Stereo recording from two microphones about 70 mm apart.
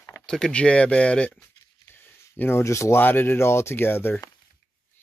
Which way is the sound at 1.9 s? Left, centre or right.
Left.